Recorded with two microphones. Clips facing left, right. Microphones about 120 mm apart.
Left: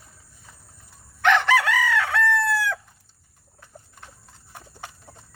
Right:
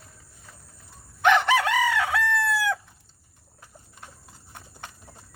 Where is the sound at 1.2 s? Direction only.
15° right (ahead or behind).